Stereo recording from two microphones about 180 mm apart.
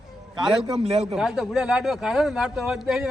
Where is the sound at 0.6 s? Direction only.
35° right (ahead or behind).